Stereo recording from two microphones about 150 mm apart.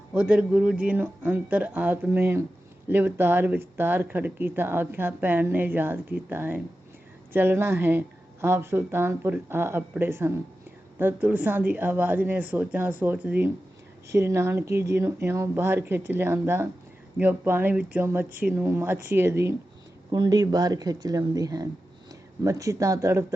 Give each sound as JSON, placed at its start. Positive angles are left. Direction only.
{"t": 0.1, "sound": "speech", "side_deg": -10}
{"t": 20.1, "sound": "speech", "side_deg": -30}